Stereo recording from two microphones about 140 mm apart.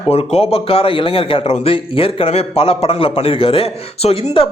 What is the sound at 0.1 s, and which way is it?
A man's voice, 45° left (ahead or behind).